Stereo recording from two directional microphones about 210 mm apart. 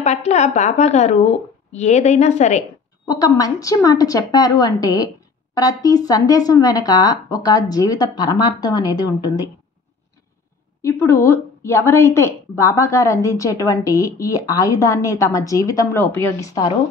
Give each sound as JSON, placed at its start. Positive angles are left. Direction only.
{"t": 0.0, "sound": "a woman's voice", "side_deg": 30}
{"t": 3.1, "sound": "a woman's voice", "side_deg": 15}
{"t": 10.8, "sound": "a woman's voice", "side_deg": 15}